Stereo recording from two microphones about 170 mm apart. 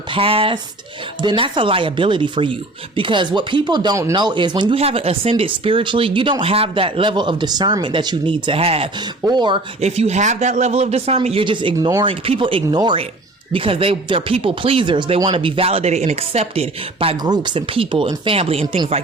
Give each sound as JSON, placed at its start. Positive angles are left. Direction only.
{"t": 0.1, "sound": "speech", "side_deg": -35}
{"t": 9.8, "sound": "speech", "side_deg": -40}